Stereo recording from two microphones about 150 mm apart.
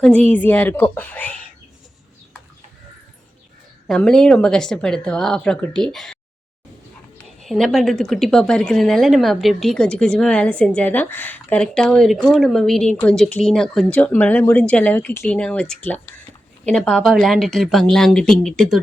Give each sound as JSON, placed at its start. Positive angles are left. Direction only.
{"t": 0.0, "sound": "a woman's voice", "side_deg": 10}
{"t": 3.8, "sound": "a woman's voice", "side_deg": 5}
{"t": 7.4, "sound": "a woman's voice", "side_deg": 0}